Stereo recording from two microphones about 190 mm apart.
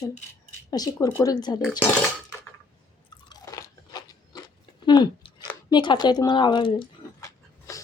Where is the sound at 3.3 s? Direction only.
20° left (ahead or behind).